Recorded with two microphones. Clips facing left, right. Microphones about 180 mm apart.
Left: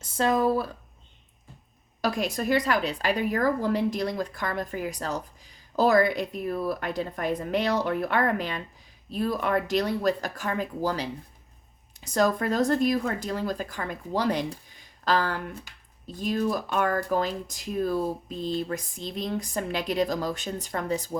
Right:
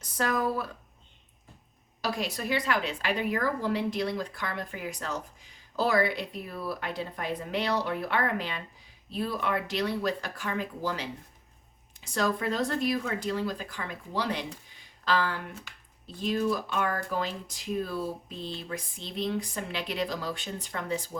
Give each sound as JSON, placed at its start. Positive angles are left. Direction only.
{"t": 0.0, "sound": "speech", "side_deg": 30}
{"t": 2.0, "sound": "a woman's voice", "side_deg": 50}